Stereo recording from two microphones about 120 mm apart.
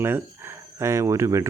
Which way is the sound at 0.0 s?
20° right (ahead or behind).